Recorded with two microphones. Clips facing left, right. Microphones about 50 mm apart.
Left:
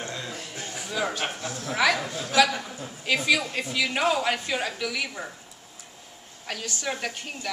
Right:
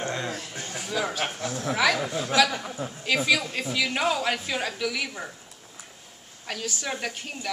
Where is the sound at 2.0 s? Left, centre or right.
Right.